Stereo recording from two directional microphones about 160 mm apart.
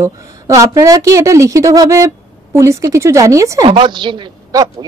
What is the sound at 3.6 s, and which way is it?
A woman's voice, 30° right (ahead or behind).